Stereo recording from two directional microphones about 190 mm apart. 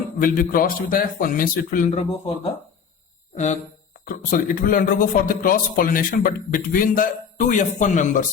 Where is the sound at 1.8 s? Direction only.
35° left (ahead or behind).